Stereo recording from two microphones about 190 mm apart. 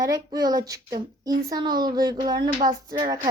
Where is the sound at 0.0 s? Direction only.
20° right (ahead or behind).